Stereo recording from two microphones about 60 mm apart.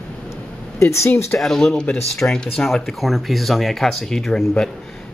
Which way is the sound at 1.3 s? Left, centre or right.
Centre.